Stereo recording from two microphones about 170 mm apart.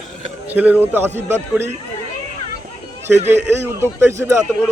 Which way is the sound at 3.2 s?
15° right (ahead or behind).